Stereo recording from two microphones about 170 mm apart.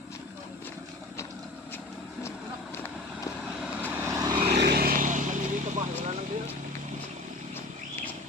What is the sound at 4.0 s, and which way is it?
Vehicle, 20° right (ahead or behind).